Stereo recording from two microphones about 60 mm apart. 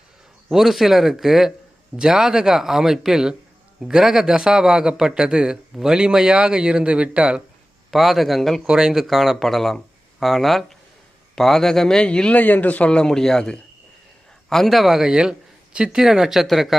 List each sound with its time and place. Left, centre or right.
0.4 s a man's voice: centre
7.9 s speech: centre
8.6 s speech: centre
12.4 s a man's voice: left; by 16.7 s centre